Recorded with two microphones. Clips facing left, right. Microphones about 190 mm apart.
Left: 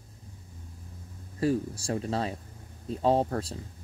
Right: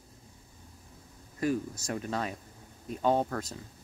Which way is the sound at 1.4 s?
30° left (ahead or behind).